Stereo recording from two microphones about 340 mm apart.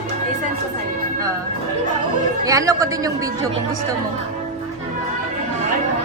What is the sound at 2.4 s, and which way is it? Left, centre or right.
Speech, centre.